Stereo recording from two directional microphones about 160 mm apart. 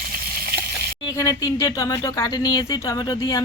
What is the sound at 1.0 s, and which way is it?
Speech, 20° left (ahead or behind).